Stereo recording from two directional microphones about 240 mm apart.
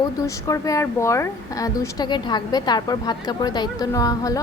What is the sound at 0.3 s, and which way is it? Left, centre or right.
A woman's voice, centre.